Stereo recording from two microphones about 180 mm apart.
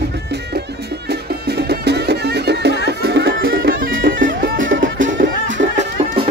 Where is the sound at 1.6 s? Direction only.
65° right (ahead or behind).